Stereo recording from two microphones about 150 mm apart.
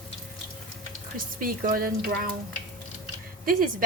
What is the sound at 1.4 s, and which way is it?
Speech, 70° right (ahead or behind).